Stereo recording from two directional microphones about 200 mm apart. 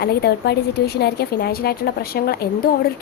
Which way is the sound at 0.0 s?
55° left (ahead or behind).